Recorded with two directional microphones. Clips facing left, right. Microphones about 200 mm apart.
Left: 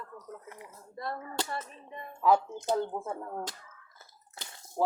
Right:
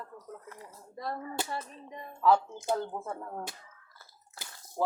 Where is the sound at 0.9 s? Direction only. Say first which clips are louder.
Even; 15° right (ahead or behind).